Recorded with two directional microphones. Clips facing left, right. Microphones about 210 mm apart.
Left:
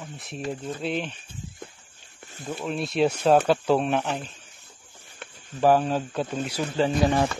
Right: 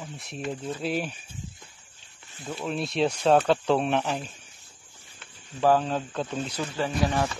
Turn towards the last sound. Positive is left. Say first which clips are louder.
# left 4 dB
turn(degrees=25)  # may be behind; listen again after turning